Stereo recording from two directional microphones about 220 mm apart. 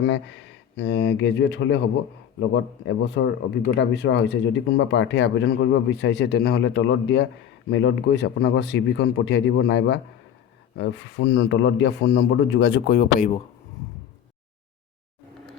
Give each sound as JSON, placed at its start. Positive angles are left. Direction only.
{"t": 0.0, "sound": "speech", "side_deg": 50}